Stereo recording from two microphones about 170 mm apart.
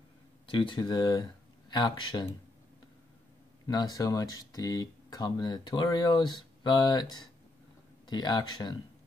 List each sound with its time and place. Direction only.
0.5 s speech: 30° left (ahead or behind)
3.6 s speech: 25° left (ahead or behind)